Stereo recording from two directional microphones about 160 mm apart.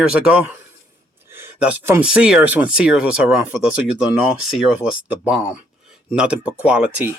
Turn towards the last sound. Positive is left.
turn(degrees=-5)  # may be behind; listen again after turning